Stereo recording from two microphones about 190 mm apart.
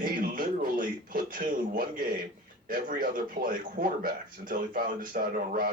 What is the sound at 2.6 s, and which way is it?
A man's voice, 45° right (ahead or behind).